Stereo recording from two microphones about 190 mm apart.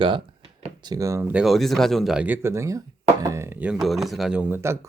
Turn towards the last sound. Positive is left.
turn(degrees=-15)  # may be behind; listen again after turning